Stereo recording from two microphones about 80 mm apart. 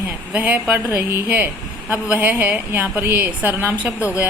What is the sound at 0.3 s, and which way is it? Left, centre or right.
Speech, right.